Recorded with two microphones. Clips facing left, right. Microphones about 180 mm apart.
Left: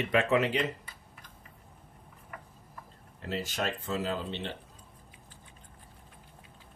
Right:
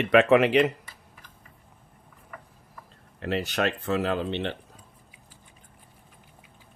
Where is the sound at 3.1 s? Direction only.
70° right (ahead or behind).